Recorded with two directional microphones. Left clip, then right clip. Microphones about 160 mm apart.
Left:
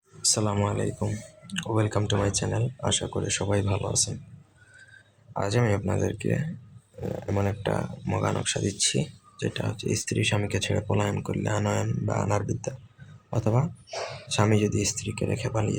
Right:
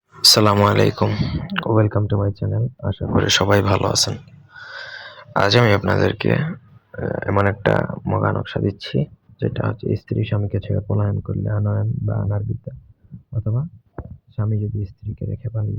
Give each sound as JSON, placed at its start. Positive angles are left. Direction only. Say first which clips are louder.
{"t": 0.2, "sound": "a sound", "louder": "right 14 dB", "side_deg": -25}
{"t": 0.6, "sound": "speech", "louder": "right 13 dB", "side_deg": -25}
{"t": 1.0, "sound": "speech", "louder": "right 12 dB", "side_deg": -15}
{"t": 3.2, "sound": "speech", "louder": "right 12 dB", "side_deg": -20}
{"t": 5.3, "sound": "speech", "louder": "right 11 dB", "side_deg": -20}
{"t": 8.0, "sound": "speech", "louder": "right 6 dB", "side_deg": 0}